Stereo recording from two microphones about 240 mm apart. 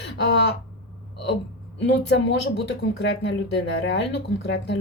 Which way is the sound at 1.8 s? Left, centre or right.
Left.